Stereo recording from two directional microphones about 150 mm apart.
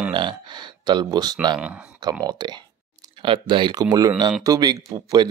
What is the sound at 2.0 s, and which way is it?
Speech, 25° right (ahead or behind).